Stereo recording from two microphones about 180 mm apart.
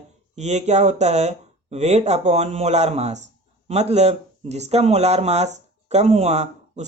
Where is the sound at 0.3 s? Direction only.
40° right (ahead or behind).